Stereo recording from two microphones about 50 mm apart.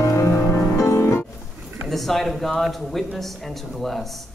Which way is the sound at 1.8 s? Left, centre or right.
Centre.